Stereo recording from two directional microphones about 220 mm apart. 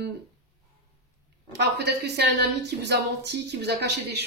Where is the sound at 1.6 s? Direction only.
50° right (ahead or behind).